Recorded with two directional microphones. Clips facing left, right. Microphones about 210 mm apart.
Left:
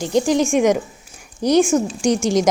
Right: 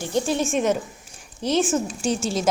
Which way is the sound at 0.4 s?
15° left (ahead or behind).